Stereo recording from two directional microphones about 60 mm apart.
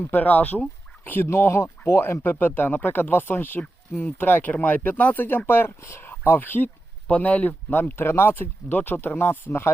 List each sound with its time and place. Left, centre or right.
0.0 s speech: left
1.3 s speech: left
2.3 s speech: left
7.9 s speech: left
9.5 s speech: left